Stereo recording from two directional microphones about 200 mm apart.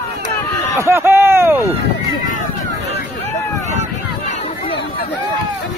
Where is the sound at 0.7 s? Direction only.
15° right (ahead or behind).